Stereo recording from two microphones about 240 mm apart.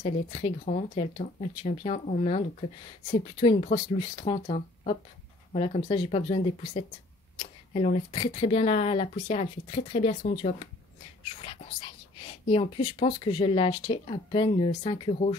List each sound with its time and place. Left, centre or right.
0.0 s speech: left
12.4 s speech: left